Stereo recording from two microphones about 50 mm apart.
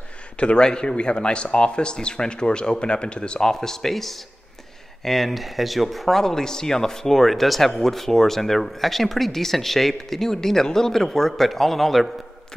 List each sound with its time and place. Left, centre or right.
0.4 s speech: centre